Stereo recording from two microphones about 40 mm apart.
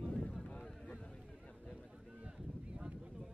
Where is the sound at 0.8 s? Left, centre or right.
Left.